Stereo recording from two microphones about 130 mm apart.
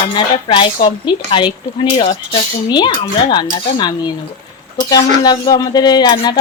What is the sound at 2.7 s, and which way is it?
Dishes, 35° left (ahead or behind).